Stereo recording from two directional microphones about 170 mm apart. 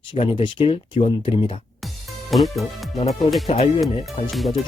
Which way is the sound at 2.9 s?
40° left (ahead or behind).